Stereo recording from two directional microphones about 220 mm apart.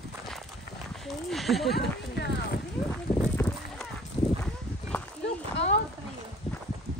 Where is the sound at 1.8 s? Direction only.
50° left (ahead or behind).